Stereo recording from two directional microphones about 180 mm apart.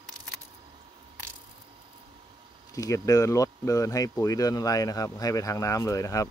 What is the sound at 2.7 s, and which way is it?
Speech, 20° left (ahead or behind).